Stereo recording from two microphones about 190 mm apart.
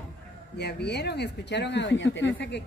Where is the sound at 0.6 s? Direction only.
60° left (ahead or behind).